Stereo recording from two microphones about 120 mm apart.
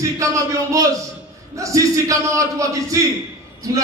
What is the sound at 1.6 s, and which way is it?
A man's voice, 25° right (ahead or behind).